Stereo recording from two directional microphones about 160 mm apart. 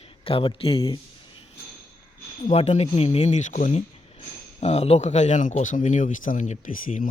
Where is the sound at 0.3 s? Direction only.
35° left (ahead or behind).